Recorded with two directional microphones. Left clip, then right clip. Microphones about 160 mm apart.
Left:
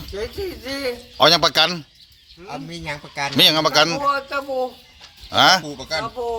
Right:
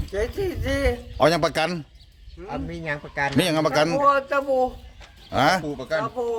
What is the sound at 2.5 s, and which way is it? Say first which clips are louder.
Speech: even; 70° left (ahead or behind).